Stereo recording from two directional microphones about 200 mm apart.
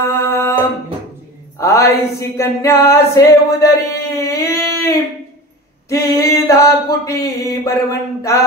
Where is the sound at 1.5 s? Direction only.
15° left (ahead or behind).